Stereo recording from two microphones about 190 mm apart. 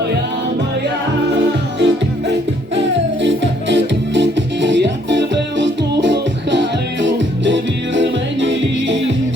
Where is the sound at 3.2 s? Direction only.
70° right (ahead or behind).